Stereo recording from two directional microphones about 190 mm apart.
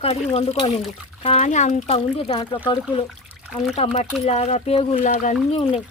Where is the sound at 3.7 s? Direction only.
35° left (ahead or behind).